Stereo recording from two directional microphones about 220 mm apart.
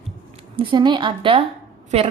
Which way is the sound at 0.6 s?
20° right (ahead or behind).